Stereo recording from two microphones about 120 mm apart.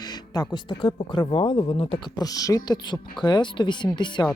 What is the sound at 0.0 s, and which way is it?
Speech, 35° left (ahead or behind).